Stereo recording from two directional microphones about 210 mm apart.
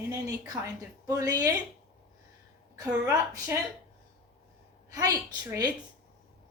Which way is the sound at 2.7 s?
20° right (ahead or behind).